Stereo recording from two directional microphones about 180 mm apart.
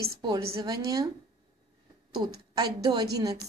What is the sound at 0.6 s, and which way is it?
Speech, 20° right (ahead or behind).